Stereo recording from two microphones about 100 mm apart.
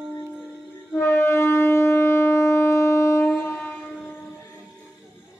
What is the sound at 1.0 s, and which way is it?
Shofar, 25° left (ahead or behind).